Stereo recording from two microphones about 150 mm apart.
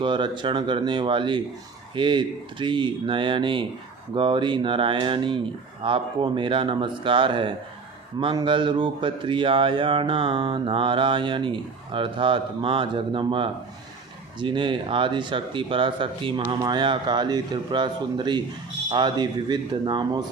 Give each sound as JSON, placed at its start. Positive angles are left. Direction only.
{"t": 0.0, "sound": "speech", "side_deg": -30}